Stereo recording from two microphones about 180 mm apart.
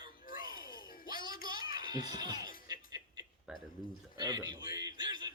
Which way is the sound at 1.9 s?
20° right (ahead or behind).